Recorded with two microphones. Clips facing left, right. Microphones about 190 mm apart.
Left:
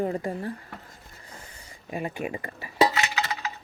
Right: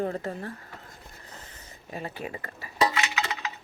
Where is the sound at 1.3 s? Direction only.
10° left (ahead or behind).